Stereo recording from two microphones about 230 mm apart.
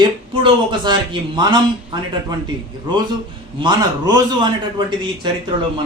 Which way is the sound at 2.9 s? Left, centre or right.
Centre.